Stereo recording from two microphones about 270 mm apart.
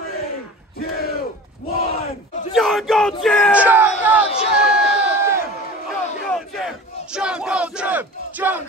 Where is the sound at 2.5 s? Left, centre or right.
Centre.